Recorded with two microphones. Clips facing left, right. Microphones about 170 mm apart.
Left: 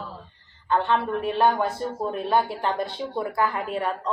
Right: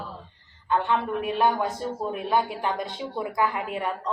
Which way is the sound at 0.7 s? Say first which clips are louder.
Left 2 dB; 20° left (ahead or behind).